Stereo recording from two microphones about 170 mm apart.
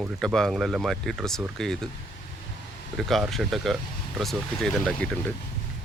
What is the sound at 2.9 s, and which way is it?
Speech, centre (ahead or behind).